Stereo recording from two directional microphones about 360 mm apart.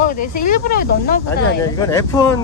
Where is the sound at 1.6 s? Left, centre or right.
Centre.